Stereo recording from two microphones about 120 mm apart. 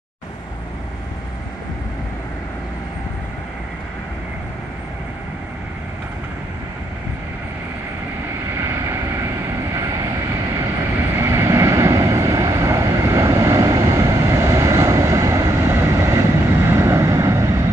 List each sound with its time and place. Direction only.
8.5 s vehicle: 25° right (ahead or behind)
11.1 s vehicle: 20° right (ahead or behind)